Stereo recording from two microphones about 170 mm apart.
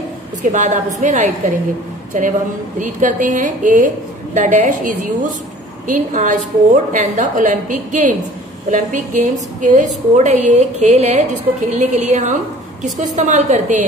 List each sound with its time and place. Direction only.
0.4 s a woman's voice: 45° right (ahead or behind)